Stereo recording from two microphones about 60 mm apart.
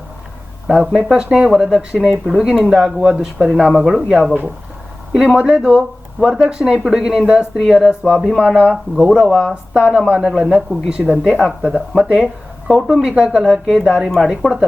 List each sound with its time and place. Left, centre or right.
0.7 s speech: centre
8.7 s speech: centre